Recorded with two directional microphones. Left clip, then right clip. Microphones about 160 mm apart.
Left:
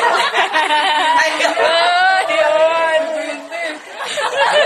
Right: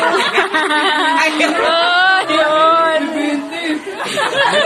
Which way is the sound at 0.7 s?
15° left (ahead or behind).